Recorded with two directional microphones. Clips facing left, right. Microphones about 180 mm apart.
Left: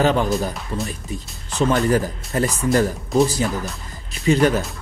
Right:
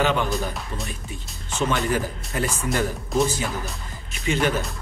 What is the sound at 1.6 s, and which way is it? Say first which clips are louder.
Speech: left 5 dB; 40° left (ahead or behind).